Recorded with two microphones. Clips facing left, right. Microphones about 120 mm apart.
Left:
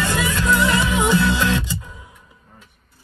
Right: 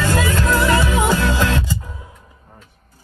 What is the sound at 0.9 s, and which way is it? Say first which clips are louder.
Music: even; 20° left (ahead or behind).